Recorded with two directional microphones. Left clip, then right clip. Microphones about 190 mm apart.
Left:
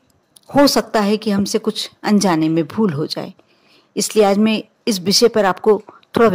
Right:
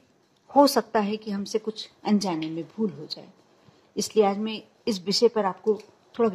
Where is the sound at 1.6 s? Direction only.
35° left (ahead or behind).